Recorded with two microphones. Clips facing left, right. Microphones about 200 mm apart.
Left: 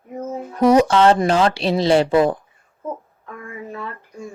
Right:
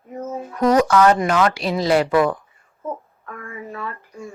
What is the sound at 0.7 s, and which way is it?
A woman's voice, 25° left (ahead or behind).